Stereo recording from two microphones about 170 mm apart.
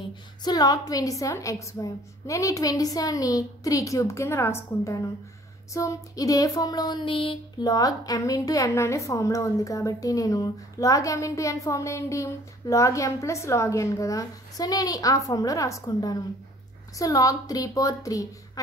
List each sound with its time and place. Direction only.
0.4 s child singing: 25° left (ahead or behind)